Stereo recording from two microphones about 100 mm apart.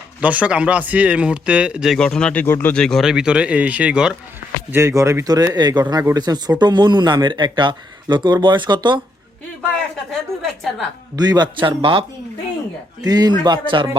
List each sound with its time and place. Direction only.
0.2 s speech: 15° right (ahead or behind)
2.0 s speech: 10° left (ahead or behind)
2.7 s speech: 5° left (ahead or behind)
3.0 s speech: 5° right (ahead or behind)
4.7 s speech: 30° right (ahead or behind)
6.6 s speech: 45° right (ahead or behind)
10.1 s a woman's voice: 5° left (ahead or behind)
11.2 s a man's voice: 45° right (ahead or behind); by 12.0 s 60° right (ahead or behind)
13.0 s speech: 40° right (ahead or behind)